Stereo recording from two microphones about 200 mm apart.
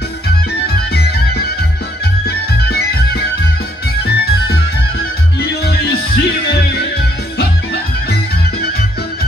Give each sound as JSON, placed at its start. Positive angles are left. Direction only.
{"t": 0.9, "sound": "music", "side_deg": 55}